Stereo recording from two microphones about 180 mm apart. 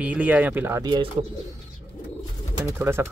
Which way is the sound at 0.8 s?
25° right (ahead or behind).